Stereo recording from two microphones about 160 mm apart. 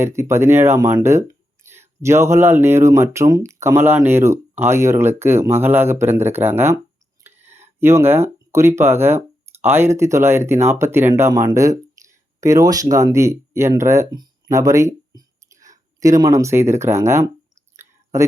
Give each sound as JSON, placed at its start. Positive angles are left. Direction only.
{"t": 0.2, "sound": "speech", "side_deg": -15}
{"t": 17.7, "sound": "clicking", "side_deg": -20}